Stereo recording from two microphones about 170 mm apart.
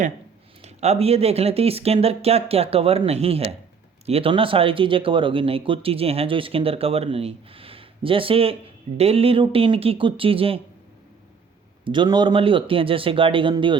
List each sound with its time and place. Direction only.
0.6 s speech: 40° right (ahead or behind)
11.9 s speech: 25° right (ahead or behind)